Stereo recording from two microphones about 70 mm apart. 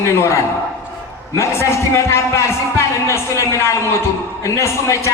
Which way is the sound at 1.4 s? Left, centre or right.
Left.